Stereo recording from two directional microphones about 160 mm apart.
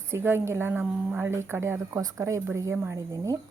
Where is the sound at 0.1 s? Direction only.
15° right (ahead or behind).